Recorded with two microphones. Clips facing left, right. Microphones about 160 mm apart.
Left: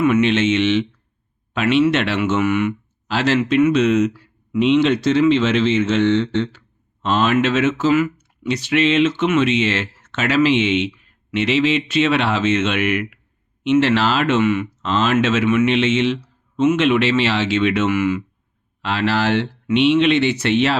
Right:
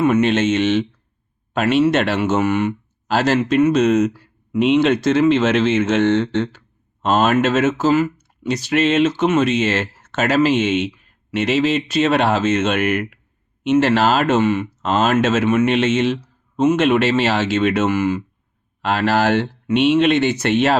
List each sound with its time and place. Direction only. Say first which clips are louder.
0.0 s speech: even; 40° right (ahead or behind)
18.8 s speech: right 2 dB; 45° right (ahead or behind)